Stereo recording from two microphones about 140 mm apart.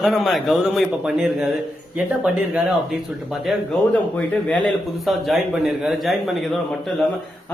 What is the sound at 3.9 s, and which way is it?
A man's voice, 10° left (ahead or behind).